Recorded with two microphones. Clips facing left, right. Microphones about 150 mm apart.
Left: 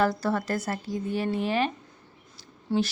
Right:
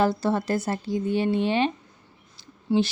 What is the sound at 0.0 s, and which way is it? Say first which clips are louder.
Speech: right 2 dB; 25° right (ahead or behind).